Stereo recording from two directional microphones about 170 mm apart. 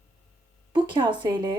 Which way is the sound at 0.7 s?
25° right (ahead or behind).